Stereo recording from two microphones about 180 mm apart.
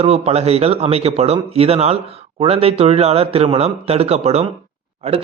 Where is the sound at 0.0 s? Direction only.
35° right (ahead or behind).